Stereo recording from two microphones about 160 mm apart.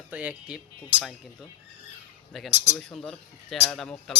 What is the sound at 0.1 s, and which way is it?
Speech, 10° right (ahead or behind).